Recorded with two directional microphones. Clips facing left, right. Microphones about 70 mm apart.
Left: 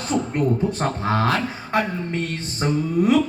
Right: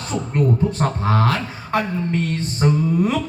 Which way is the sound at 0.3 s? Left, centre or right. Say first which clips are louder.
Right 6 dB; centre.